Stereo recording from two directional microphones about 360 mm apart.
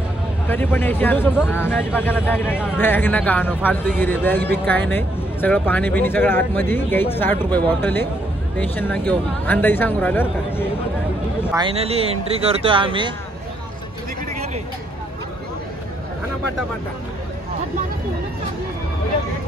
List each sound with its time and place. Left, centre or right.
0.5 s a man's voice: centre
11.5 s speech: centre